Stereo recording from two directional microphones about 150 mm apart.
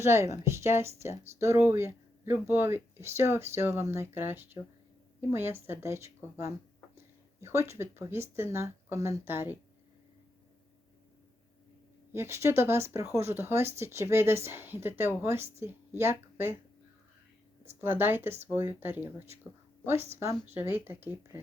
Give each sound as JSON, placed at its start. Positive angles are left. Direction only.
{"t": 0.0, "sound": "speech", "side_deg": -20}
{"t": 7.4, "sound": "speech", "side_deg": -15}
{"t": 12.1, "sound": "speech", "side_deg": -20}
{"t": 17.7, "sound": "speech", "side_deg": -15}